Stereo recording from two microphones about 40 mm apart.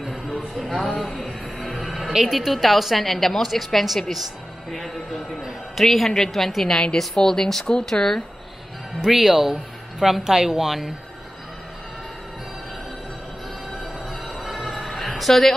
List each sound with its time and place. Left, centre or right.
0.3 s a sound: centre
1.9 s music: centre
2.3 s a woman's voice: centre
5.4 s a woman's voice: centre
7.2 s a woman's voice: centre
9.1 s a woman's voice: centre
14.3 s music: centre
14.9 s a sound: centre